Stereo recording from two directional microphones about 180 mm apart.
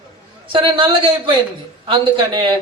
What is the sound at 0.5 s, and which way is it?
A woman's voice, 30° right (ahead or behind).